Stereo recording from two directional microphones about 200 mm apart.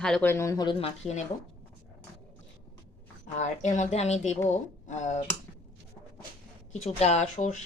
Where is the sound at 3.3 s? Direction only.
35° left (ahead or behind).